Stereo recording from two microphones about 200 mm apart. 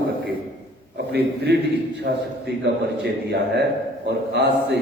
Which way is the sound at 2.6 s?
55° right (ahead or behind).